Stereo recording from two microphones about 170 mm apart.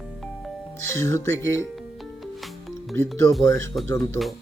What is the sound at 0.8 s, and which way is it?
Speech, 15° left (ahead or behind).